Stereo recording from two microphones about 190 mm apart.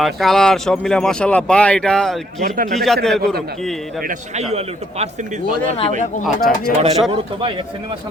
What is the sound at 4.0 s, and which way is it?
Speech, 45° right (ahead or behind).